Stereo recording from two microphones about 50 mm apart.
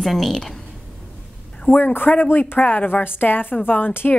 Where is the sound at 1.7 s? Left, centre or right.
Left.